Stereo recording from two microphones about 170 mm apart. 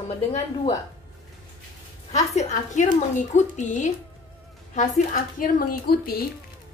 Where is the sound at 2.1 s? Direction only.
40° left (ahead or behind); by 6.2 s 60° left (ahead or behind).